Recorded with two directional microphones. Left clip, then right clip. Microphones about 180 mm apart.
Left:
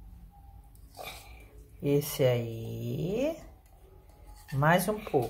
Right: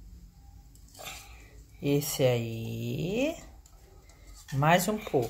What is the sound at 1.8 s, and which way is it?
Speech, 15° right (ahead or behind).